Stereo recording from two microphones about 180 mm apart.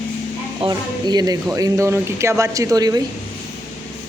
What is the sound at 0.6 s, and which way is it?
Speech, 20° right (ahead or behind).